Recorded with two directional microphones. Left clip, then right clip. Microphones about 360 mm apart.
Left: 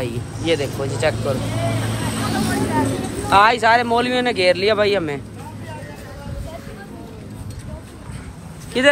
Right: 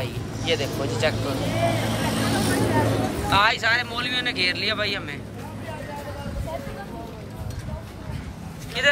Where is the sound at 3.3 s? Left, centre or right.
Centre.